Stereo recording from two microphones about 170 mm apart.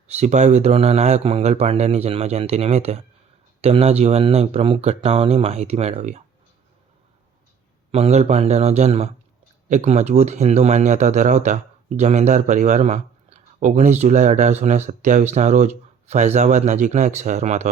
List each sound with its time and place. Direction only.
0.1 s speech: 40° right (ahead or behind)
7.9 s speech: 35° right (ahead or behind)